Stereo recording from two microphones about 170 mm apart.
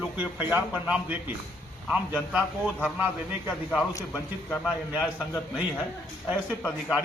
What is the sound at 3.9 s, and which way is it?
Speech, 15° left (ahead or behind).